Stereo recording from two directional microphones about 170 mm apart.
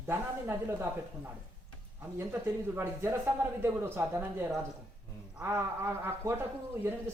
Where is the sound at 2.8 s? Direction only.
15° right (ahead or behind).